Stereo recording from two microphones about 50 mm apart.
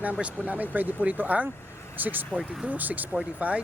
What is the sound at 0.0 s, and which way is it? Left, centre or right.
Speech, right.